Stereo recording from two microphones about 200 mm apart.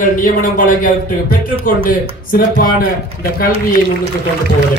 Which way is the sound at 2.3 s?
45° left (ahead or behind).